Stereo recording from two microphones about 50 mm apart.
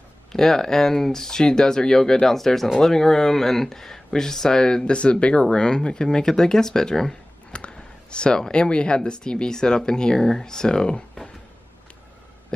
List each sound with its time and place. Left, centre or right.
0.3 s speech: centre
7.5 s speech: left